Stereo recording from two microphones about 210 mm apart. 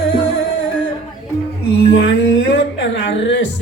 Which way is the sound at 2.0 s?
55° left (ahead or behind).